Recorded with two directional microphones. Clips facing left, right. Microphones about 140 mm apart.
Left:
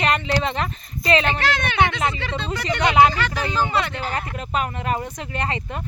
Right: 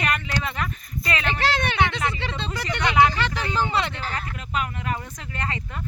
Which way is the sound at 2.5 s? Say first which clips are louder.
Left 4 dB; 20° left (ahead or behind).